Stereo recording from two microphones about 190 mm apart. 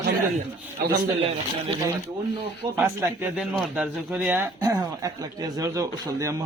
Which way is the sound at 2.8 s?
10° right (ahead or behind).